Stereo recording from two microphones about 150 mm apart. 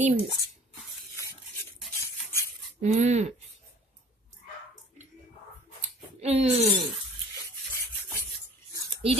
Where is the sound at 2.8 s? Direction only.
50° right (ahead or behind).